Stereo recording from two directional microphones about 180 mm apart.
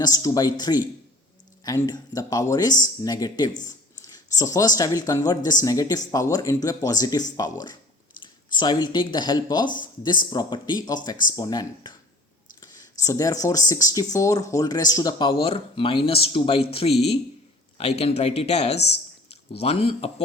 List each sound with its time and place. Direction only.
0.0 s speech: 20° left (ahead or behind)